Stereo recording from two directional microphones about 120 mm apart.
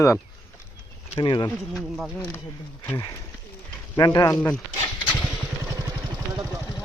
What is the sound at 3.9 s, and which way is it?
Speech, 30° left (ahead or behind).